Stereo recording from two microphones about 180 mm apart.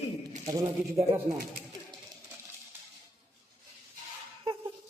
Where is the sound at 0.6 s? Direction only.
15° right (ahead or behind).